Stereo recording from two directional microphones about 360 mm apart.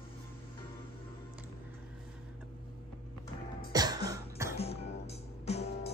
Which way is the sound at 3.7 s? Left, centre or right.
Centre.